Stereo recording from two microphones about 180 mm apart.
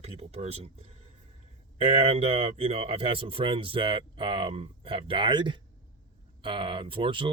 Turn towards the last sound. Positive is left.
turn(degrees=-30)  # may be behind; listen again after turning